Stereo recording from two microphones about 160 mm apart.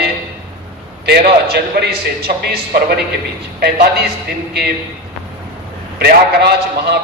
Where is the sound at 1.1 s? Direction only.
75° right (ahead or behind).